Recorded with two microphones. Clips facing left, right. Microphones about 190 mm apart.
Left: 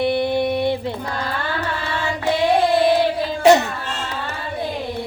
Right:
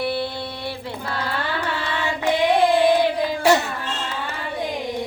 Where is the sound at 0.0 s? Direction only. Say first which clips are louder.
Left 7 dB; 20° left (ahead or behind).